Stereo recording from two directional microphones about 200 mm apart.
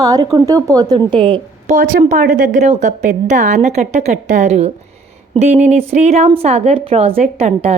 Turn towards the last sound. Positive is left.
turn(degrees=-35)  # may be behind; listen again after turning